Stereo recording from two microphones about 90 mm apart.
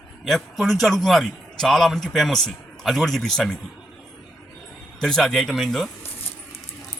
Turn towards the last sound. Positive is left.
turn(degrees=5)  # may be behind; listen again after turning